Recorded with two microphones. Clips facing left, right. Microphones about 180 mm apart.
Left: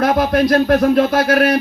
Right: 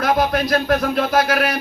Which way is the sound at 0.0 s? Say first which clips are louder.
Left 3 dB; 30° left (ahead or behind).